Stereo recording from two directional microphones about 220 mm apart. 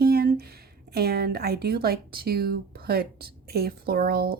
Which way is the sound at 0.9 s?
45° right (ahead or behind).